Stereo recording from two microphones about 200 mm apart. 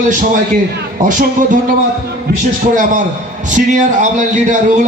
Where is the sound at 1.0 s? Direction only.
40° right (ahead or behind).